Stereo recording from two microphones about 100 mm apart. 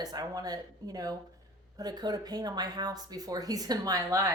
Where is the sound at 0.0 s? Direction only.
40° right (ahead or behind).